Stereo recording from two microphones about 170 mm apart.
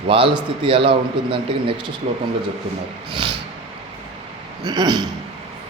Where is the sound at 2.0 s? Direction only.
40° right (ahead or behind).